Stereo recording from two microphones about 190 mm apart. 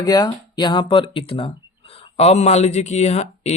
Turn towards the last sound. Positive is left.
turn(degrees=35)  # may be behind; listen again after turning